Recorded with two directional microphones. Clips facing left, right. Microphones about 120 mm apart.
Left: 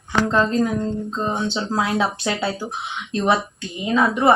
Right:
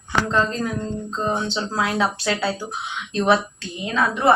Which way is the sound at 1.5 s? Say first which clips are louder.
Left 2 dB; 20° left (ahead or behind).